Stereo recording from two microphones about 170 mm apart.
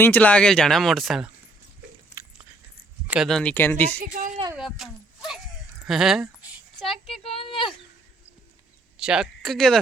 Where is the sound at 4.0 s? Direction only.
55° right (ahead or behind).